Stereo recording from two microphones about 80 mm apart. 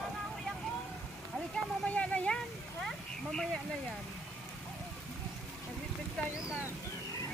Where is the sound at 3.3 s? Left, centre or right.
Centre.